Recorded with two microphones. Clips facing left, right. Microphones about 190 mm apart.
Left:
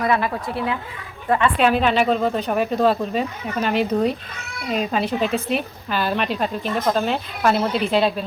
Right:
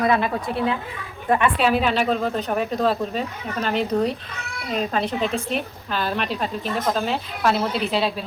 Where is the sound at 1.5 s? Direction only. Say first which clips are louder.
Left 2 dB; 5° right (ahead or behind).